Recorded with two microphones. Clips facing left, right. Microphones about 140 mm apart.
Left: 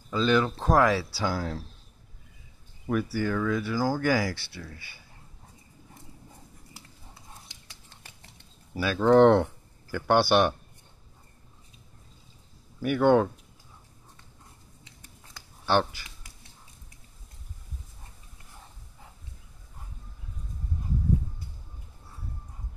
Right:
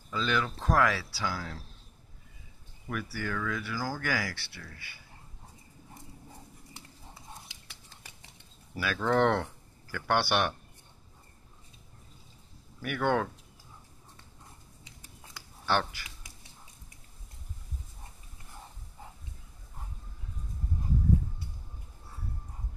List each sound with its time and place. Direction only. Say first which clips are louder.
0.1 s speech: left 7 dB; 30° left (ahead or behind)
2.9 s speech: left 8 dB; 30° left (ahead or behind)
8.7 s speech: left 8 dB; 25° left (ahead or behind)
12.8 s speech: left 8 dB; 25° left (ahead or behind)
15.6 s speech: left 5 dB; 25° left (ahead or behind)